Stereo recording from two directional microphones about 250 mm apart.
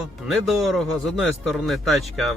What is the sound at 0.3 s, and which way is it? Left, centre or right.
Speech, centre.